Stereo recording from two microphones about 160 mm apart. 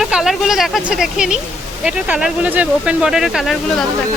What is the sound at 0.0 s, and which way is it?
Speech, centre (ahead or behind).